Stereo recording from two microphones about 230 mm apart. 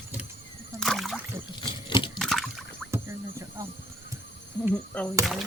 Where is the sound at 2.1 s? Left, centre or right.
Centre.